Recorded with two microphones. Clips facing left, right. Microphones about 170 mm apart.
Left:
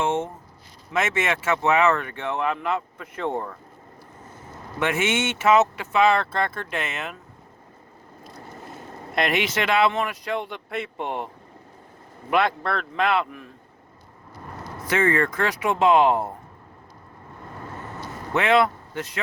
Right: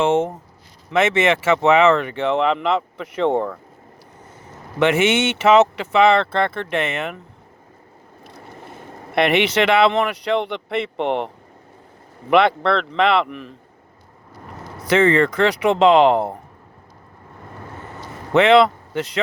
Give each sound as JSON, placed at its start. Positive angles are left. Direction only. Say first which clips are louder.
{"t": 0.0, "sound": "speech", "louder": "right 7 dB", "side_deg": -90}
{"t": 0.9, "sound": "speech", "louder": "right 7 dB", "side_deg": -75}
{"t": 4.8, "sound": "speech", "louder": "right 7 dB", "side_deg": -80}
{"t": 9.1, "sound": "speech", "louder": "right 7 dB", "side_deg": -65}
{"t": 12.3, "sound": "speech", "louder": "right 7 dB", "side_deg": -75}
{"t": 14.8, "sound": "speech", "louder": "right 6 dB", "side_deg": -75}
{"t": 18.3, "sound": "speech", "louder": "right 7 dB", "side_deg": -75}